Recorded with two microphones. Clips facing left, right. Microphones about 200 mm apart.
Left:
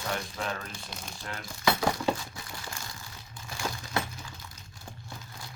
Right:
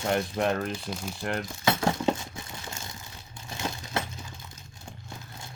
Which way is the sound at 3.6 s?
25° right (ahead or behind).